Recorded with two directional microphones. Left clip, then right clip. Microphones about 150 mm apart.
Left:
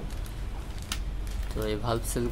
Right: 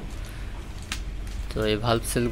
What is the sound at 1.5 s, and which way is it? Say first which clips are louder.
Speech: right 6 dB; 15° right (ahead or behind).